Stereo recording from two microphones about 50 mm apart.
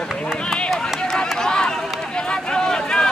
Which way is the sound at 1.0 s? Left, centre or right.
Centre.